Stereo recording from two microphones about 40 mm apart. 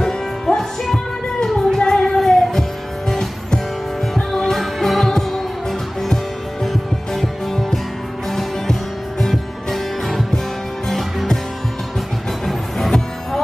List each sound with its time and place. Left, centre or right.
0.0 s music: centre
1.7 s music: centre
2.1 s music: centre
12.4 s music: centre